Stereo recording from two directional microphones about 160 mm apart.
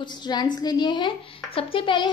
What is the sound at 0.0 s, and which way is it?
A woman's voice, 25° left (ahead or behind).